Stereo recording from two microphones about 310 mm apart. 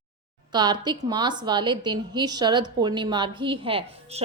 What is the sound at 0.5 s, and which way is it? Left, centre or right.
A woman's voice, centre.